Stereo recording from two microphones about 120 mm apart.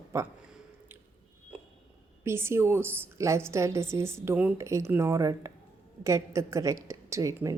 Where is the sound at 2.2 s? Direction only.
20° right (ahead or behind).